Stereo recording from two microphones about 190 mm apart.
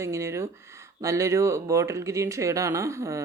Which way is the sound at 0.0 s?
15° right (ahead or behind).